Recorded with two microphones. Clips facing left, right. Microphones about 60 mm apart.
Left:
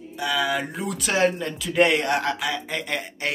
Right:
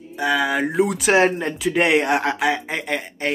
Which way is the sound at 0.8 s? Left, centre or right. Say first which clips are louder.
Right 2 dB; right.